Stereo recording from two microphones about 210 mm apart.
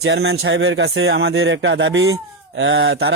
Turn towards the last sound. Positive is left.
turn(degrees=-50)  # may be behind; listen again after turning